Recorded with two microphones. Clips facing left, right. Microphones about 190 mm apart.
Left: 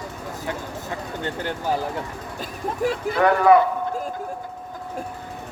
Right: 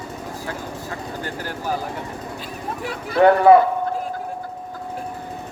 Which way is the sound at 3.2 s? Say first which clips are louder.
Right 5 dB; 30° right (ahead or behind).